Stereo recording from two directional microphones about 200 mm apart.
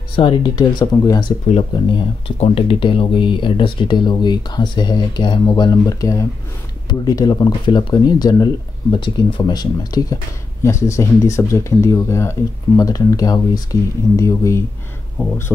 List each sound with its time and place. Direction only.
0.1 s speech: 25° left (ahead or behind)
1.5 s speech: 30° left (ahead or behind); by 15.5 s 10° left (ahead or behind)